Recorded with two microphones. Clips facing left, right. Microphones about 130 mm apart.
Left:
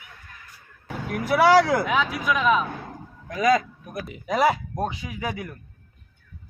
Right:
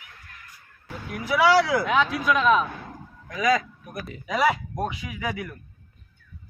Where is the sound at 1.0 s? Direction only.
50° left (ahead or behind).